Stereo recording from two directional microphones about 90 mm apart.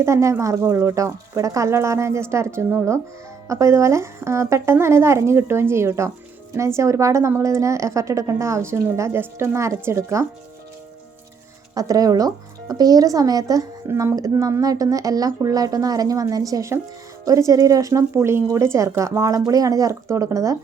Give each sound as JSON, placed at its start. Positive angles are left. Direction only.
{"t": 0.0, "sound": "a woman's voice", "side_deg": -35}
{"t": 11.7, "sound": "speech", "side_deg": -45}
{"t": 13.8, "sound": "a woman's voice", "side_deg": -30}